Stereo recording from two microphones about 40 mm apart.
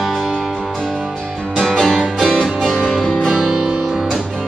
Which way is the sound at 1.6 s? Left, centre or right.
Centre.